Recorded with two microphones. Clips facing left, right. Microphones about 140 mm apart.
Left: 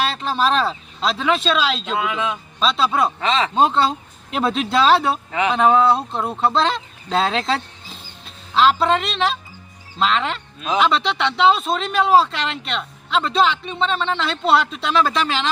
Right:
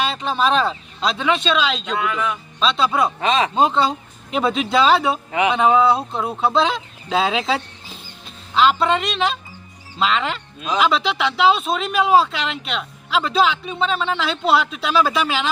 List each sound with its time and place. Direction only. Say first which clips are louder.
0.0 s speech: even; centre (ahead or behind)
2.0 s speech: right 1 dB; 20° left (ahead or behind)
2.6 s speech: even; centre (ahead or behind)
3.2 s speech: right 1 dB; 15° right (ahead or behind)
3.5 s speech: even; centre (ahead or behind)